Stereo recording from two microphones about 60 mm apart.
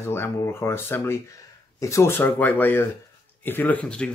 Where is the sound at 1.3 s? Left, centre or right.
Left.